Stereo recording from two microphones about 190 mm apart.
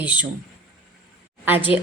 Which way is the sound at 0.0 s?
10° right (ahead or behind).